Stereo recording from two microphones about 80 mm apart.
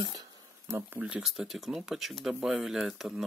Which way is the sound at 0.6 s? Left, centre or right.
Right.